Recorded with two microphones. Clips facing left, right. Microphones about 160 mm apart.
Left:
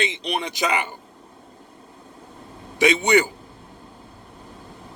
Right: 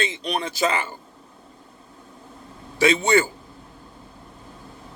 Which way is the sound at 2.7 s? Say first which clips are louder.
Even; 15° left (ahead or behind).